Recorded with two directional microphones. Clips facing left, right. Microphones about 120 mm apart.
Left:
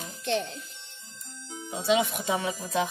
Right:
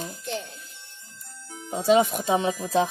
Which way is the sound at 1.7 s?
45° right (ahead or behind).